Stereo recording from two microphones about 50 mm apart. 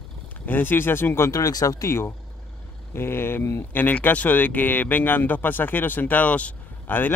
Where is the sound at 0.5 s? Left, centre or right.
Left.